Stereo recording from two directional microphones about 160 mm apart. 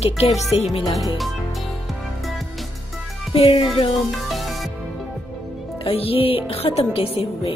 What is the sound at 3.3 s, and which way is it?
Speech, 35° left (ahead or behind).